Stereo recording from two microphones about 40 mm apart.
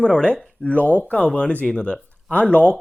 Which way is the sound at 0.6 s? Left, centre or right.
Left.